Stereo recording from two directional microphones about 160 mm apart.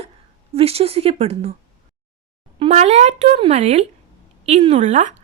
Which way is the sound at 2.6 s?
40° right (ahead or behind).